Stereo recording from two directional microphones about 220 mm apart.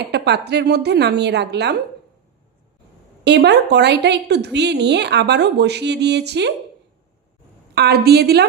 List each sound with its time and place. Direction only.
0.0 s a woman's voice: 50° right (ahead or behind)
3.2 s a woman's voice: 50° right (ahead or behind)
7.8 s a woman's voice: 45° right (ahead or behind)